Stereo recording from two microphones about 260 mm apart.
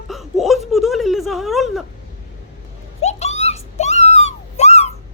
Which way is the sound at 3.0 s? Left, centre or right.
Left.